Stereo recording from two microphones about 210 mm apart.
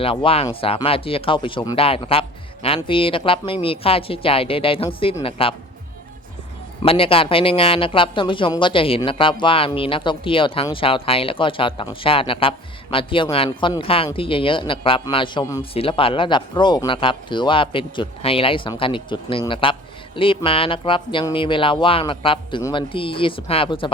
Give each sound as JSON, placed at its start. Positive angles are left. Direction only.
{"t": 0.0, "sound": "speech", "side_deg": 25}
{"t": 6.8, "sound": "speech", "side_deg": 25}